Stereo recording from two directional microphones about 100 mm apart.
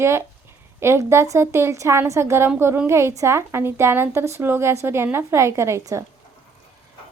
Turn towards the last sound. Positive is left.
turn(degrees=-30)  # may be behind; listen again after turning